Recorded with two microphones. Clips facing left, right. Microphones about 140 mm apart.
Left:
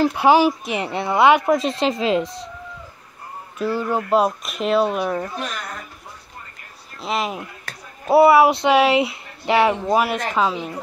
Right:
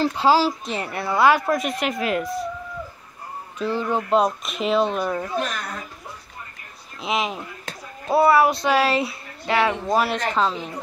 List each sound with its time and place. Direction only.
0.0 s a woman's voice: 15° left (ahead or behind)
3.5 s speech: 10° left (ahead or behind)
7.0 s speech: centre (ahead or behind)
7.7 s a sound: 20° right (ahead or behind)
8.1 s a woman's voice: 25° left (ahead or behind)
9.8 s speech: 10° left (ahead or behind)